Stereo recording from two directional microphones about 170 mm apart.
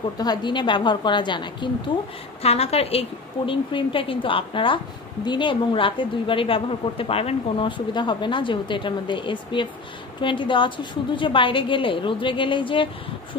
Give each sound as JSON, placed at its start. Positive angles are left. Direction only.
{"t": 0.2, "sound": "a woman's voice", "side_deg": 25}